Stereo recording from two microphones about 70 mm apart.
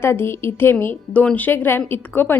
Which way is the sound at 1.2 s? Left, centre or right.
Centre.